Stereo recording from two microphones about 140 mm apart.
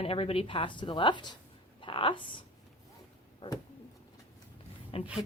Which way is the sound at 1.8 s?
35° left (ahead or behind).